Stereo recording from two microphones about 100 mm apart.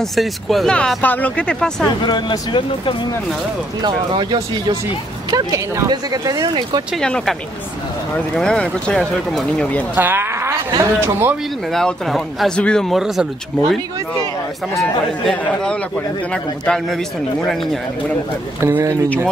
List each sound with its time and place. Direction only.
0.0 s speech: centre (ahead or behind)
0.7 s speech: 15° left (ahead or behind)
2.0 s speech: 50° left (ahead or behind)
3.8 s speech: 50° right (ahead or behind)
5.3 s speech: 35° right (ahead or behind)
7.0 s speech: 10° left (ahead or behind)
8.4 s speech: 10° left (ahead or behind)
9.9 s speech: 20° right (ahead or behind)
11.7 s speech: centre (ahead or behind)
15.2 s speech: 5° left (ahead or behind)
18.6 s speech: 25° right (ahead or behind)